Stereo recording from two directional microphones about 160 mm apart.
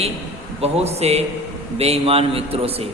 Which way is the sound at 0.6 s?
40° right (ahead or behind).